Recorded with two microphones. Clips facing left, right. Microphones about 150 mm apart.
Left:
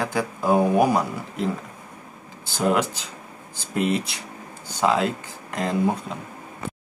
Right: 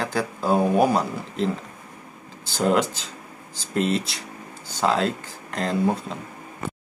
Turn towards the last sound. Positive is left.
turn(degrees=10)  # may be behind; listen again after turning